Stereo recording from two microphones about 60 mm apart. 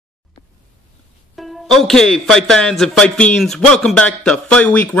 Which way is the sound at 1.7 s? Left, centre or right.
Centre.